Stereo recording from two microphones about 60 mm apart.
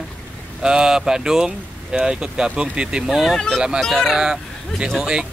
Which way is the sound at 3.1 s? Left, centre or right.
Centre.